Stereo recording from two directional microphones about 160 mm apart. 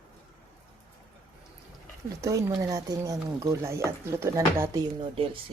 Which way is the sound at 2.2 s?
20° right (ahead or behind).